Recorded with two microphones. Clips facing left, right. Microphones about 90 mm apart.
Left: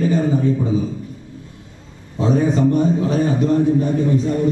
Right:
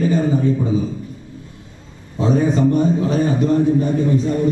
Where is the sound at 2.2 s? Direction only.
15° right (ahead or behind).